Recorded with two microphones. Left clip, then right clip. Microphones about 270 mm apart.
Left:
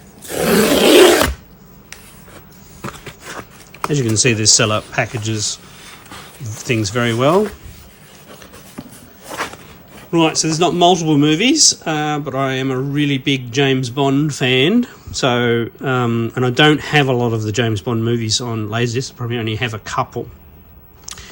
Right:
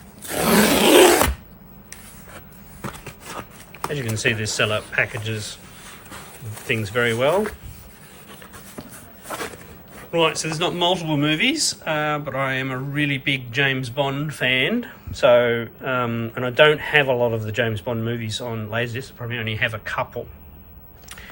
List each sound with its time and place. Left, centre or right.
0.3 s roar: centre
3.9 s speech: centre
6.7 s speech: left
10.1 s speech: centre